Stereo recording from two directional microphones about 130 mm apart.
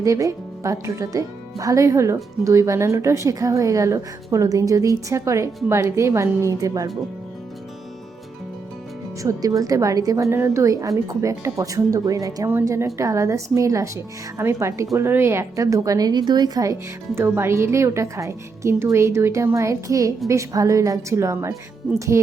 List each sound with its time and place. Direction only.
0.0 s a woman's voice: 25° right (ahead or behind)
9.2 s a woman's voice: 25° right (ahead or behind)
17.2 s a woman's voice: 20° right (ahead or behind)